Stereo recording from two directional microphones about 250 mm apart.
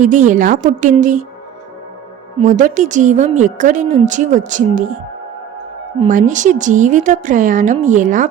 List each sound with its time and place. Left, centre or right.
0.0 s a woman's voice: right
2.4 s a woman's voice: right
6.0 s a woman's voice: right